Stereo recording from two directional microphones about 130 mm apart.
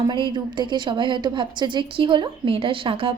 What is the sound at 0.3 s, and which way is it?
A woman's voice, 35° right (ahead or behind).